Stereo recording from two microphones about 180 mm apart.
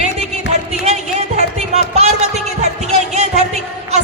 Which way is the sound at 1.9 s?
35° right (ahead or behind).